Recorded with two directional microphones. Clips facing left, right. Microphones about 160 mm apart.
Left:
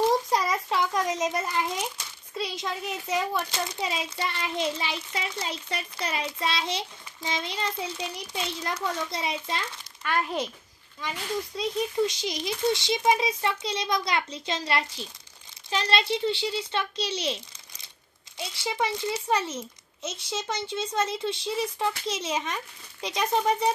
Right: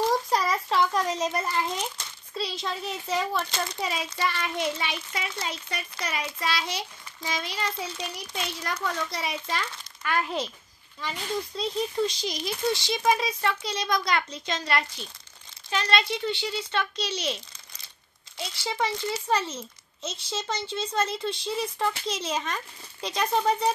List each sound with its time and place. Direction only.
0.3 s a child's voice: 15° left (ahead or behind)
4.2 s speech: 25° left (ahead or behind)
11.0 s speech: 15° left (ahead or behind); by 17.4 s 30° left (ahead or behind)
18.4 s a child's voice: 15° left (ahead or behind)